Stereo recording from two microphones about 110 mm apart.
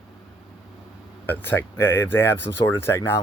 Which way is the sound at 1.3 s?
20° left (ahead or behind).